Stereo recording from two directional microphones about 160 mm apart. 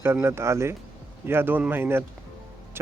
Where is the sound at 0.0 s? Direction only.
15° right (ahead or behind).